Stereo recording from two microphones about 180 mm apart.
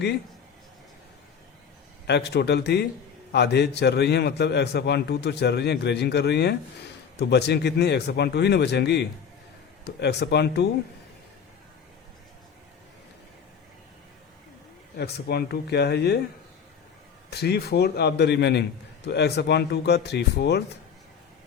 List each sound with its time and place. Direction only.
2.0 s a man's voice: 70° left (ahead or behind)
14.9 s speech: 60° left (ahead or behind)
17.3 s a man's voice: 65° left (ahead or behind)